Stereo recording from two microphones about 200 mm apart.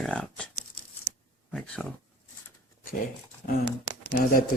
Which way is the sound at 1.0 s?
5° left (ahead or behind).